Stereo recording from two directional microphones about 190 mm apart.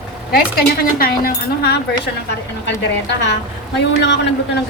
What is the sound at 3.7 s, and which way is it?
Speech, 70° left (ahead or behind).